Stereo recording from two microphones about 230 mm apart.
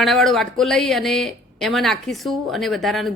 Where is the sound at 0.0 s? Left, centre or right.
Centre.